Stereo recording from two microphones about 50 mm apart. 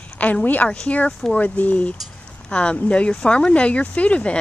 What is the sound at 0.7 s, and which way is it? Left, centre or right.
Speech, left.